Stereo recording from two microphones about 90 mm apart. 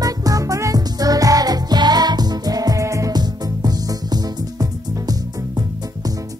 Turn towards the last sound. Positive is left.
turn(degrees=-45)  # may be behind; listen again after turning